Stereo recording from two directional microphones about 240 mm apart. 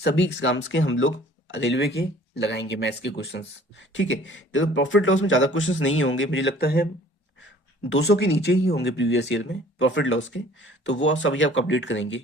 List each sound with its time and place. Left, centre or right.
0.0 s speech: left
7.9 s speech: left